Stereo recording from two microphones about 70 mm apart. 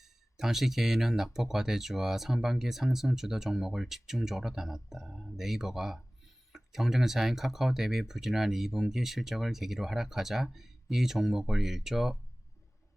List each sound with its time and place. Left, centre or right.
0.0 s speech: centre